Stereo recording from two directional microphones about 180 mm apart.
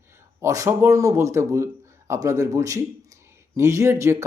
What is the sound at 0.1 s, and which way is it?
A man's voice, 15° right (ahead or behind).